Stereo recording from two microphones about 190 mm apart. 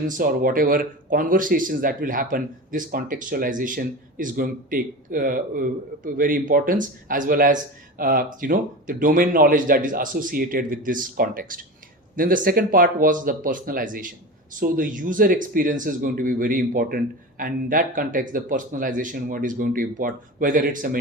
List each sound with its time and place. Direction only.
0.2 s speech: 50° right (ahead or behind)